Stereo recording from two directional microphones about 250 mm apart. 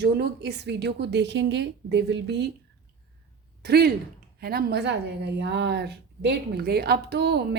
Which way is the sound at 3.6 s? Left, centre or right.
Right.